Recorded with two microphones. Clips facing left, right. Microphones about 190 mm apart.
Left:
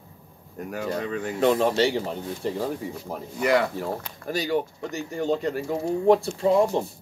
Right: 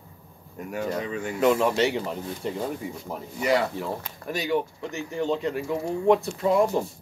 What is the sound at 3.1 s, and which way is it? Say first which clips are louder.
Speech: left 2 dB; 50° left (ahead or behind).